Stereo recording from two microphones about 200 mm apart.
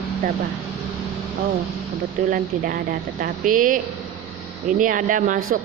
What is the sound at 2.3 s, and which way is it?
A woman's voice, 45° right (ahead or behind).